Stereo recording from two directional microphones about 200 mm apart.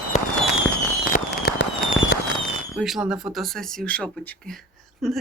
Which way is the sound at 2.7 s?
Centre (ahead or behind).